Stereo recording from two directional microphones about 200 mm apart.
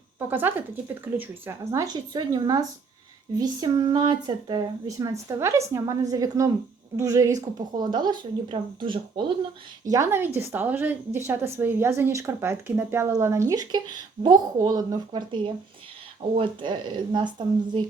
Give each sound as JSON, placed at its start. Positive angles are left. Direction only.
{"t": 0.3, "sound": "a woman's voice", "side_deg": -10}
{"t": 9.9, "sound": "a woman's voice", "side_deg": -15}